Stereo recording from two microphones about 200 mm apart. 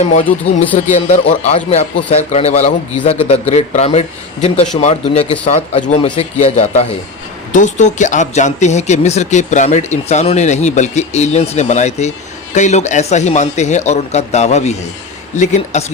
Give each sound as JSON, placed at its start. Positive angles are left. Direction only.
{"t": 0.0, "sound": "speech", "side_deg": 35}
{"t": 0.3, "sound": "speech", "side_deg": 10}
{"t": 0.9, "sound": "speech", "side_deg": 35}